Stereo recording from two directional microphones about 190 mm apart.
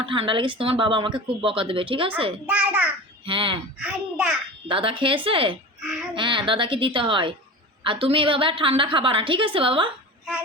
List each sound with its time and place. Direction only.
0.0 s speech: 25° right (ahead or behind)
2.5 s a child's voice: 5° right (ahead or behind)
3.2 s speech: 25° right (ahead or behind)
3.8 s a child's voice: 5° right (ahead or behind)
4.7 s speech: 30° right (ahead or behind)